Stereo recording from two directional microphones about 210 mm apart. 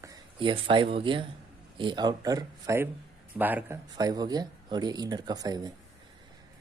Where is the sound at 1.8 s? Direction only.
20° right (ahead or behind).